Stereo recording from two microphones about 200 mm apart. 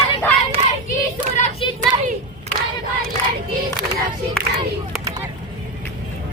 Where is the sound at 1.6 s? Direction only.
25° left (ahead or behind).